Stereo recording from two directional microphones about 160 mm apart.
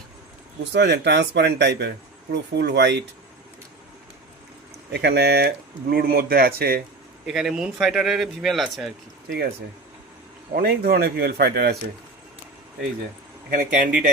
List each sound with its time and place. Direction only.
0.6 s speech: 90° right
4.9 s speech: 90° right; by 6.8 s 70° right (ahead or behind)
7.3 s speech: centre (ahead or behind)
10.5 s speech: 75° right (ahead or behind)
13.5 s speech: 60° right (ahead or behind)